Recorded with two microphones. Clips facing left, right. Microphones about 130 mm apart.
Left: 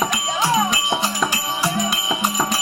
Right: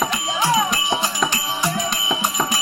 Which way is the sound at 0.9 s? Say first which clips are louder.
Even; 5° left (ahead or behind).